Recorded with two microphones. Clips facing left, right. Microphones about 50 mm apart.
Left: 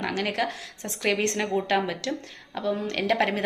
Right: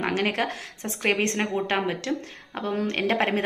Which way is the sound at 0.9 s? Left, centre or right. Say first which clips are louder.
Right 1 dB; right.